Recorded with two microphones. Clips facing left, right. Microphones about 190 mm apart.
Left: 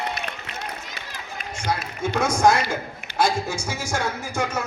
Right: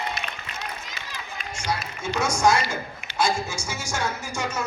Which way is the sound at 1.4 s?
55° left (ahead or behind).